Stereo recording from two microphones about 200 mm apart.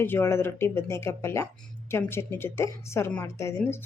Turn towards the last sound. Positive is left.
turn(degrees=15)  # may be behind; listen again after turning